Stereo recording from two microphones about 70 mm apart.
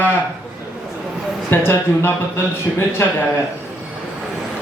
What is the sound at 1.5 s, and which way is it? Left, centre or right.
A man's voice, left.